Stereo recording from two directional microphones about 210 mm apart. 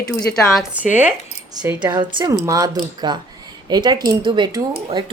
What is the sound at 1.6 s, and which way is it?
A woman's voice, 20° right (ahead or behind).